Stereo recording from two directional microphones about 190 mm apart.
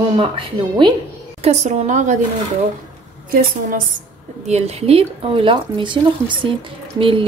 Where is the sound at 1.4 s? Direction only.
40° right (ahead or behind).